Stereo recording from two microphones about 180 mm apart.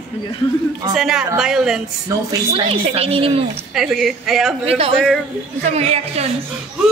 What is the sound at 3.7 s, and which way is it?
Speech, centre (ahead or behind).